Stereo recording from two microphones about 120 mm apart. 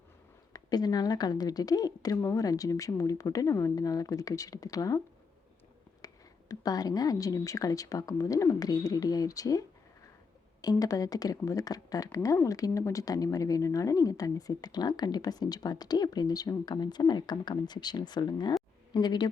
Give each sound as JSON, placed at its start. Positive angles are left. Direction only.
{"t": 0.5, "sound": "speech", "side_deg": 35}
{"t": 6.0, "sound": "a sound", "side_deg": 30}
{"t": 6.5, "sound": "speech", "side_deg": 30}